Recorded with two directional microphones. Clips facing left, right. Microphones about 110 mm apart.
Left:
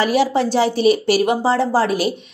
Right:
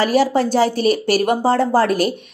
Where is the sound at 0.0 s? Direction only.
45° right (ahead or behind).